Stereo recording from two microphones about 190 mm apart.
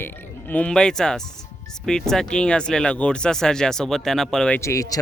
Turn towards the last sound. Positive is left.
turn(degrees=15)  # may be behind; listen again after turning